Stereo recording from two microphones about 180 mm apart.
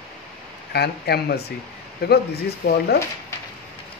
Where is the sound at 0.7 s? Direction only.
65° left (ahead or behind).